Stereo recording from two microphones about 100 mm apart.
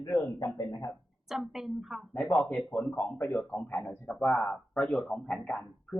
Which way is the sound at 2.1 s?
10° left (ahead or behind).